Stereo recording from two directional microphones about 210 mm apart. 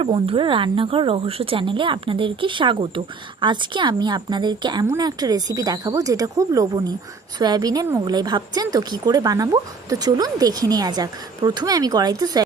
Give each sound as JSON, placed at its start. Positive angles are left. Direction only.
{"t": 0.0, "sound": "a woman's voice", "side_deg": -25}